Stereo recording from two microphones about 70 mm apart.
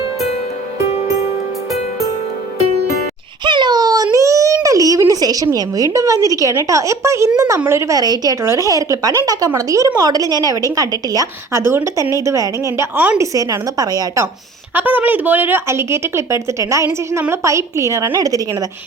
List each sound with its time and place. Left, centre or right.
3.4 s a sound: right
5.5 s a woman's voice: right
7.9 s a woman's voice: right
8.4 s a woman's voice: right
12.2 s a woman's voice: right
14.8 s a woman's voice: right